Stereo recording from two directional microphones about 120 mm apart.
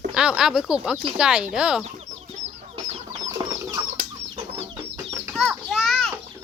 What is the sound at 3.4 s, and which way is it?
Bird, 35° right (ahead or behind).